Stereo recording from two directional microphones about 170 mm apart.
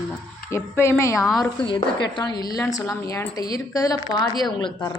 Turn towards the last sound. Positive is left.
turn(degrees=25)  # may be behind; listen again after turning